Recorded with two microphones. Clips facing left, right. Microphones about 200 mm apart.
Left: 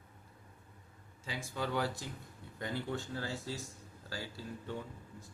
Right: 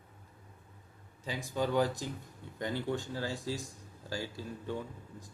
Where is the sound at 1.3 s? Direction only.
15° right (ahead or behind).